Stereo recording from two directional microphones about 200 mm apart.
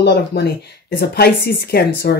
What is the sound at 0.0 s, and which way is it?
Speech, 55° left (ahead or behind).